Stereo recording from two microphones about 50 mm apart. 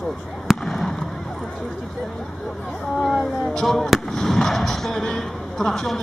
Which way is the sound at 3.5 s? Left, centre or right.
Centre.